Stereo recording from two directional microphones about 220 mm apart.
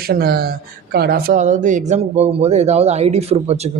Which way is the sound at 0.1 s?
45° right (ahead or behind).